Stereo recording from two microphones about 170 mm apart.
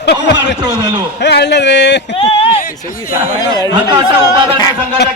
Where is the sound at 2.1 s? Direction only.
35° left (ahead or behind).